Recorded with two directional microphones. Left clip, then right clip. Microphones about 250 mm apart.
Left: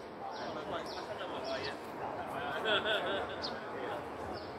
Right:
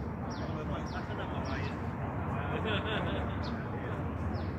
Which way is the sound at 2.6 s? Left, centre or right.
Left.